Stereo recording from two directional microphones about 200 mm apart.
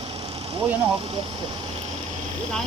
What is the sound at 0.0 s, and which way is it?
Vehicle, 30° right (ahead or behind).